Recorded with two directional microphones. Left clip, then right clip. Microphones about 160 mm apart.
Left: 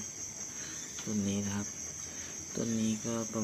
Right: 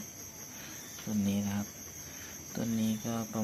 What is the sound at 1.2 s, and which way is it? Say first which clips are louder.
Speech: right 2 dB; 35° right (ahead or behind).